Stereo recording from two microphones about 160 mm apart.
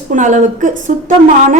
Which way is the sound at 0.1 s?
50° right (ahead or behind).